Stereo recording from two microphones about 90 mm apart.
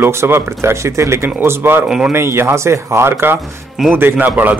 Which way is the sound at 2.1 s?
30° right (ahead or behind).